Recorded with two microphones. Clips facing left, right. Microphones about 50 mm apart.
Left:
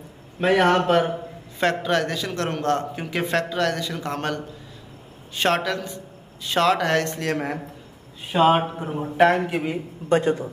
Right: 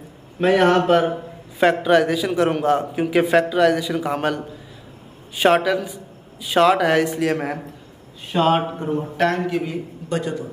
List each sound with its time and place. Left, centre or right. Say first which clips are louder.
0.4 s a man's voice: right 3 dB; centre
5.4 s a man's voice: right 6 dB; centre
9.1 s a man's voice: left 4 dB; centre
9.7 s a man's voice: left 4 dB; left